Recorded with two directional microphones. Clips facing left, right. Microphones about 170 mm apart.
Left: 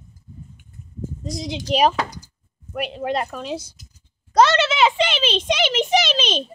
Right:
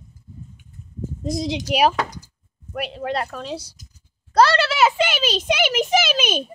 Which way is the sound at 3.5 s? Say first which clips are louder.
Left 2 dB; 35° right (ahead or behind).